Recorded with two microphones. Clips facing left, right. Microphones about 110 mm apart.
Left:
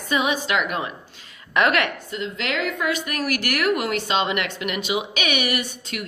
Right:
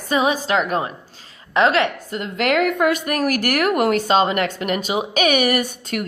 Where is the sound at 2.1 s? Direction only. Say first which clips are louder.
Right 9 dB; 50° right (ahead or behind).